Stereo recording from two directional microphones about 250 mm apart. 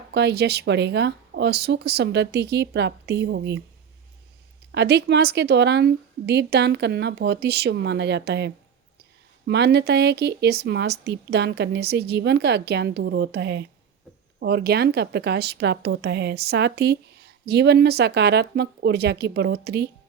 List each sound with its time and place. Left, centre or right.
0.1 s speech: right
4.7 s speech: right